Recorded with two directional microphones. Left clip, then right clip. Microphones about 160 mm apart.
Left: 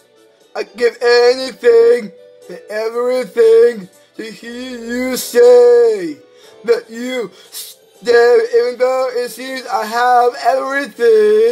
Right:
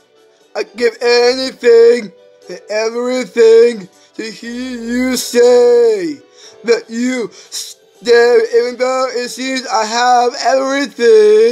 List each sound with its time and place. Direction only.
0.5 s speech: 20° right (ahead or behind)